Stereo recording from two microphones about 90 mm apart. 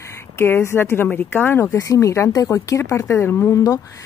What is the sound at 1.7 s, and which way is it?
Speech, 35° left (ahead or behind).